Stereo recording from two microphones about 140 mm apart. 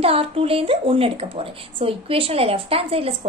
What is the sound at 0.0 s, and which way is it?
A woman's voice, 45° right (ahead or behind).